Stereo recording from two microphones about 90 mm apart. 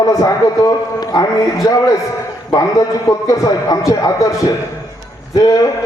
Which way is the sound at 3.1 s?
40° left (ahead or behind).